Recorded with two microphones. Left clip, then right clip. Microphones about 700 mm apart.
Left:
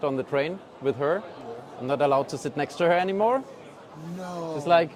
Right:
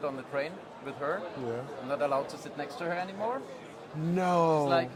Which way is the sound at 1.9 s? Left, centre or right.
Left.